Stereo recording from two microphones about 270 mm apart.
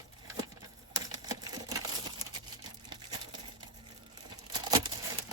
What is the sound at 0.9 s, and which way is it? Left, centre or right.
Typewriter, centre.